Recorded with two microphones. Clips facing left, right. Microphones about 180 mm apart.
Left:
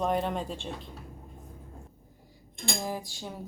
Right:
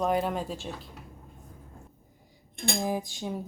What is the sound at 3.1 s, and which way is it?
Music, 15° right (ahead or behind).